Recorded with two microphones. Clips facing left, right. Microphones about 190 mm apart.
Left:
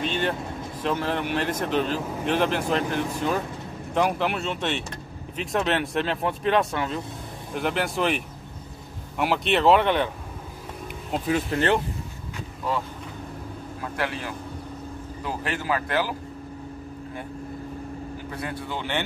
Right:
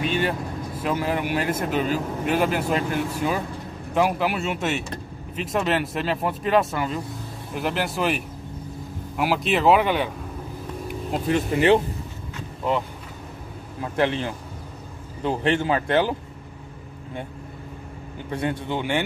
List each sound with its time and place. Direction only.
0.0 s speech: 5° right (ahead or behind)
9.2 s speech: centre (ahead or behind)
13.7 s a man's voice: 25° right (ahead or behind)
18.3 s a man's voice: 25° right (ahead or behind)
18.8 s speech: 10° right (ahead or behind)